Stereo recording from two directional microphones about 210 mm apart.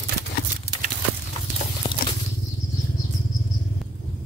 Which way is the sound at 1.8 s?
25° left (ahead or behind).